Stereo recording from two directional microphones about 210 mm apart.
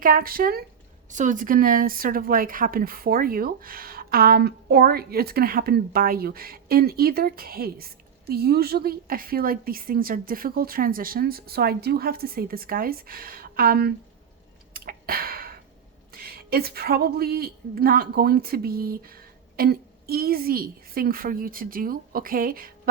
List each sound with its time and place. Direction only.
0.0 s speech: 40° right (ahead or behind)
14.7 s a sound: 45° right (ahead or behind)
16.1 s speech: 45° right (ahead or behind)